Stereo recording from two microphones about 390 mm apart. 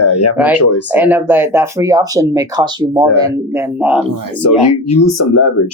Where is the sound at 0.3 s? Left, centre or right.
Centre.